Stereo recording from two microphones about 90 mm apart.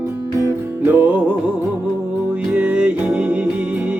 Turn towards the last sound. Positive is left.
turn(degrees=-15)  # may be behind; listen again after turning